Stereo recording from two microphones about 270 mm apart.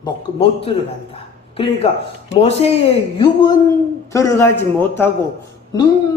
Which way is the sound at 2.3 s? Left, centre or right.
Left.